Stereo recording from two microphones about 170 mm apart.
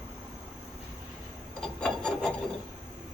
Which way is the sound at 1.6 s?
5° left (ahead or behind).